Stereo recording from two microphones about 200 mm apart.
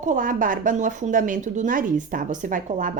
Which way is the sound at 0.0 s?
40° right (ahead or behind).